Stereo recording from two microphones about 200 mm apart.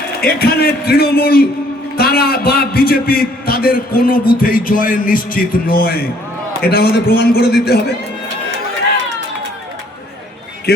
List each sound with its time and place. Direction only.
0.2 s a man's voice: 50° left (ahead or behind)